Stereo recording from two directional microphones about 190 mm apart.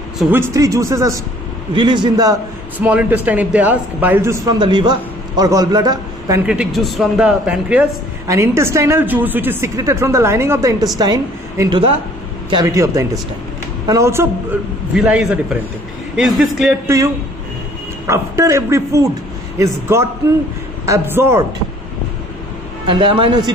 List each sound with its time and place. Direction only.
0.2 s speech: 10° right (ahead or behind)
2.8 s speech: 10° right (ahead or behind)
4.6 s a man's voice: 25° right (ahead or behind)
6.4 s speech: 5° right (ahead or behind)
16.8 s speech: 15° right (ahead or behind)
22.8 s speech: 25° right (ahead or behind)